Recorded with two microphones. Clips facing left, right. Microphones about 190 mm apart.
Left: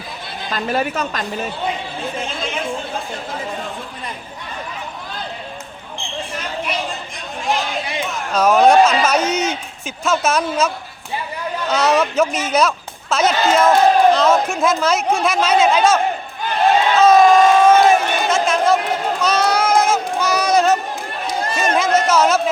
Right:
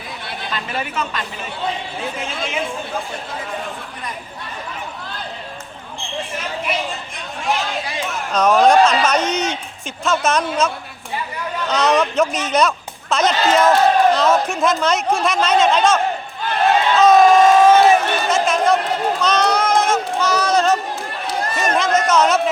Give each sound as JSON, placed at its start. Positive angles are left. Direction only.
{"t": 0.5, "sound": "speech", "side_deg": 40}
{"t": 8.3, "sound": "a man's voice", "side_deg": 5}
{"t": 11.7, "sound": "a man's voice", "side_deg": 5}
{"t": 17.0, "sound": "a sound", "side_deg": 0}